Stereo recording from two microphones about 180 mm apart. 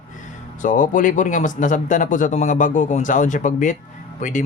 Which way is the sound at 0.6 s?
45° left (ahead or behind).